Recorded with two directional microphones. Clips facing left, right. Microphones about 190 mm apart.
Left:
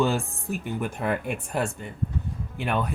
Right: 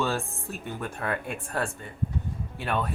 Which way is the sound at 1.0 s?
15° left (ahead or behind).